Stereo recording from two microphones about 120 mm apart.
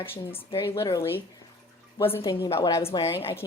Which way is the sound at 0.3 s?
25° left (ahead or behind).